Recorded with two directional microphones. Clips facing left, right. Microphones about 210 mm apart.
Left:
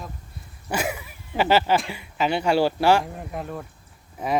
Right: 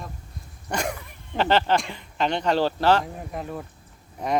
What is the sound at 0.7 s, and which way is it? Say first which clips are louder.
Speech: left 1 dB; 5° left (ahead or behind).